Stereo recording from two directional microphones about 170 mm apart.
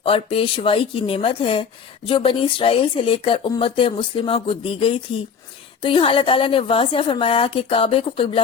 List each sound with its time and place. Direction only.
0.0 s a woman's voice: 30° left (ahead or behind)